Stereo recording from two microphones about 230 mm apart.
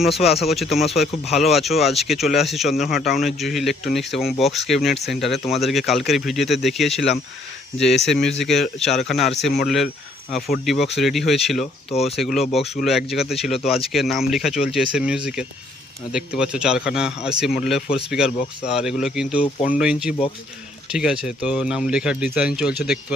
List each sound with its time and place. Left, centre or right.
0.2 s speech: centre
11.9 s speech: left
12.1 s speech: centre